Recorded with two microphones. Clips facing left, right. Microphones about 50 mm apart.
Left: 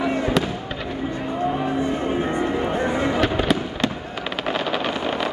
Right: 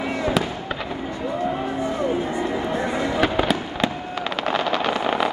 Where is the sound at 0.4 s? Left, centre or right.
Centre.